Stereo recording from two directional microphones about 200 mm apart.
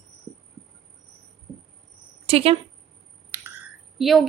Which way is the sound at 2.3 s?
30° right (ahead or behind).